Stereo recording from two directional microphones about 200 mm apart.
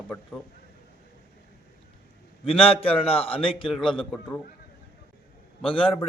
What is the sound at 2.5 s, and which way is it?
Speech, 30° left (ahead or behind).